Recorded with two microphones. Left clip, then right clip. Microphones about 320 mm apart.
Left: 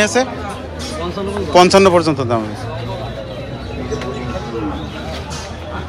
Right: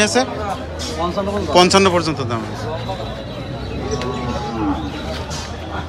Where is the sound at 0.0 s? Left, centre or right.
Centre.